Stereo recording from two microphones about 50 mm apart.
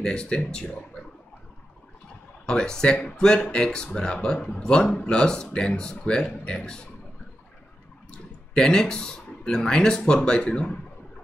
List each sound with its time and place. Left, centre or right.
0.0 s speech: centre
2.4 s speech: centre
8.1 s speech: centre